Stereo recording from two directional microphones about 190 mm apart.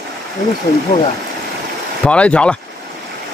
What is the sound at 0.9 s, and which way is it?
Speech, 35° left (ahead or behind).